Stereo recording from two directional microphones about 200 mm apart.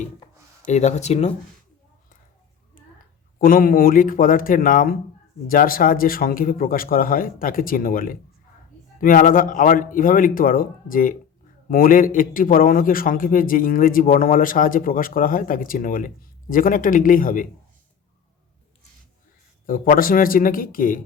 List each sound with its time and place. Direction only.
0.6 s speech: 35° left (ahead or behind)
2.8 s a sound: 40° left (ahead or behind)
3.3 s a man's voice: 45° left (ahead or behind)
19.6 s a man's voice: 45° left (ahead or behind)